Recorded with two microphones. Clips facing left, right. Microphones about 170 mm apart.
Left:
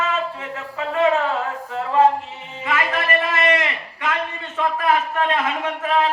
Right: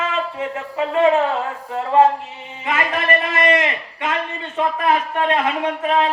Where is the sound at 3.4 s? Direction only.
30° right (ahead or behind).